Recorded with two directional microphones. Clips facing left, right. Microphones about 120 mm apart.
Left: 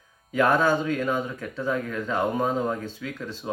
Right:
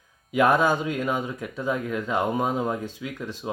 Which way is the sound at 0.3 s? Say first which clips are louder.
Right 1 dB; 15° right (ahead or behind).